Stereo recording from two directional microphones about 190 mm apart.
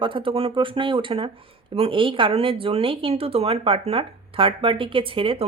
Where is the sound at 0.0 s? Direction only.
25° right (ahead or behind).